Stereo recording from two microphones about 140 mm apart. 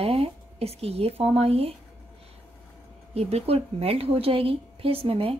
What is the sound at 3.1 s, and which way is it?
Speech, 45° right (ahead or behind).